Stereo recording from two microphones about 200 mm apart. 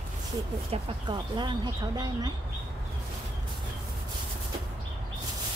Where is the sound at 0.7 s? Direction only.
25° right (ahead or behind).